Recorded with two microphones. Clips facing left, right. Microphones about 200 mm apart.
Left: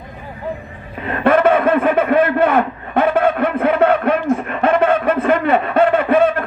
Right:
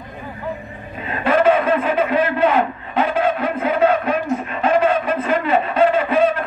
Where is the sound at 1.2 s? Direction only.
60° left (ahead or behind).